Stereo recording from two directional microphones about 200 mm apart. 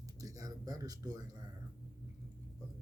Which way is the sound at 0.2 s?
15° right (ahead or behind).